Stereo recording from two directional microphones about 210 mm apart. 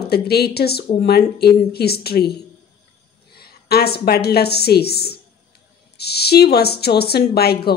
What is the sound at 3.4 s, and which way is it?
A woman's voice, 50° left (ahead or behind).